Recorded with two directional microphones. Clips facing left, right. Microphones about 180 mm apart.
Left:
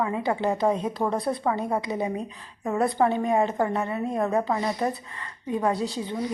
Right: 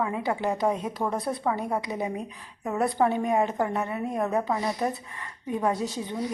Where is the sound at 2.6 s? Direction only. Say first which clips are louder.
Left 2 dB; centre (ahead or behind).